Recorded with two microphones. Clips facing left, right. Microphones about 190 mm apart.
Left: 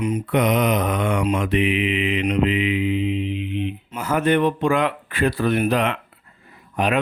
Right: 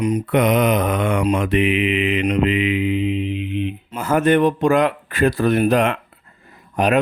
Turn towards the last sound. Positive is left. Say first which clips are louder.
# right 4 dB
turn(degrees=-45)  # may be behind; listen again after turning